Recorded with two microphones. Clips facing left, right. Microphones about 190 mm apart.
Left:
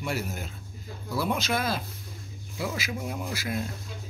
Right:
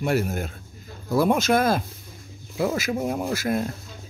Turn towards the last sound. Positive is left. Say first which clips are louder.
# right 7 dB
turn(degrees=-50)  # may be behind; listen again after turning